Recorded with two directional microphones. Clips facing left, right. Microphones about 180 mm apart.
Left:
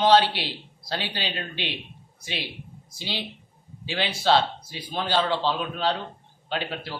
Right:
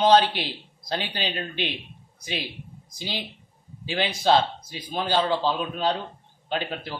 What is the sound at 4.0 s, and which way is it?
A man's voice, 15° right (ahead or behind).